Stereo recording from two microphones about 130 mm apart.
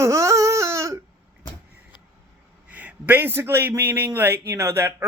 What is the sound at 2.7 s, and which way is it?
A man's voice, 10° right (ahead or behind).